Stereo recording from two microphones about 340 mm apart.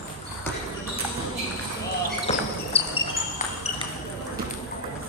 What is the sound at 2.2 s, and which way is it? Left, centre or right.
Basketball bounce, centre.